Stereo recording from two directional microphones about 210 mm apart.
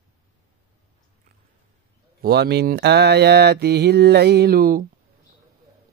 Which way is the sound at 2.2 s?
50° right (ahead or behind).